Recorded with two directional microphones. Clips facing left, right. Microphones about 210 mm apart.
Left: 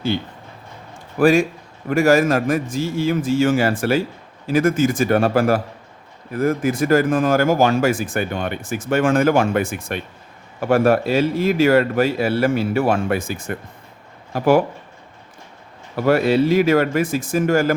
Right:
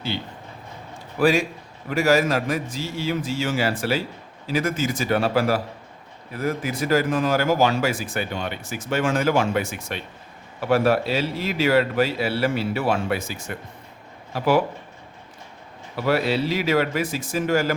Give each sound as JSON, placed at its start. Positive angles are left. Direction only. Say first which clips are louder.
{"t": 1.2, "sound": "speech", "louder": "left 5 dB", "side_deg": 50}
{"t": 16.0, "sound": "speech", "louder": "left 6 dB", "side_deg": 50}